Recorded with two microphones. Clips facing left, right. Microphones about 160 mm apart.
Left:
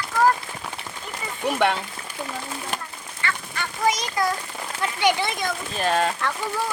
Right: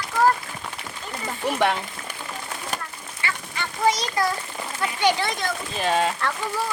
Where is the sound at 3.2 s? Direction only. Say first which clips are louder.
Left 2 dB; 15° right (ahead or behind).